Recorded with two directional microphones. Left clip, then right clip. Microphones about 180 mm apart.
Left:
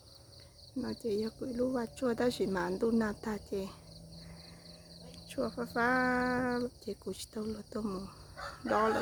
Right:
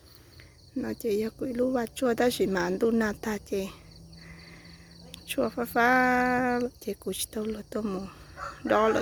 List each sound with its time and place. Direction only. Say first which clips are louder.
0.8 s speech: right 6 dB; 20° right (ahead or behind)
5.1 s speech: right 8 dB; 30° right (ahead or behind)
6.4 s speech: right 7 dB; 35° right (ahead or behind)
7.1 s speech: right 8 dB; 20° right (ahead or behind)